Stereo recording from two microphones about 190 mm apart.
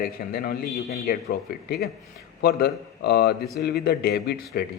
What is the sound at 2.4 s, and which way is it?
A man's voice, 60° left (ahead or behind).